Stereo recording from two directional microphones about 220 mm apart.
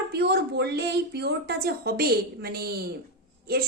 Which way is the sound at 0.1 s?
50° right (ahead or behind).